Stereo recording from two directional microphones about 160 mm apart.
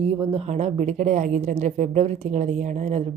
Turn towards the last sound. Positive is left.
turn(degrees=-45)  # may be behind; listen again after turning